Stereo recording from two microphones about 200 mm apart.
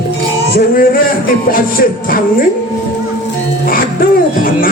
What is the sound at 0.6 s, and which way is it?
Music, 45° left (ahead or behind).